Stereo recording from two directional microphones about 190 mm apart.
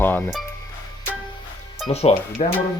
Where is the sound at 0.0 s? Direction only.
10° left (ahead or behind).